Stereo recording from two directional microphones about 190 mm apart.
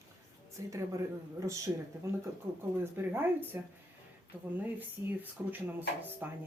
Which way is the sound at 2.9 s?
10° right (ahead or behind).